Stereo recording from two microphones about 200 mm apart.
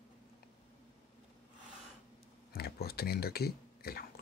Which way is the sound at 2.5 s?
50° left (ahead or behind).